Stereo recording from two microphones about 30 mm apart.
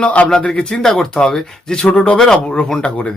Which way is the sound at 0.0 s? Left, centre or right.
Left.